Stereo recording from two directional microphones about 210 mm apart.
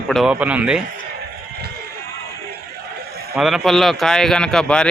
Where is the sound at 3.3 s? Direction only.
Centre (ahead or behind).